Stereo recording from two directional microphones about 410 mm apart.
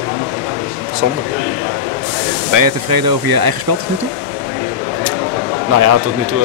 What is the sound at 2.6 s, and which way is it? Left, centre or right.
Speech, right.